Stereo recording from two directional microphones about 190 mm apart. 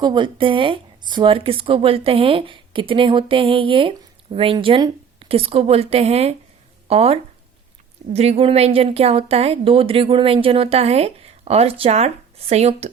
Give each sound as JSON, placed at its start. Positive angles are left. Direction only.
{"t": 0.0, "sound": "a woman's voice", "side_deg": -25}